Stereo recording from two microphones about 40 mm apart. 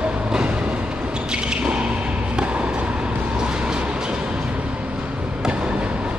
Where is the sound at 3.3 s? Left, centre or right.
Right.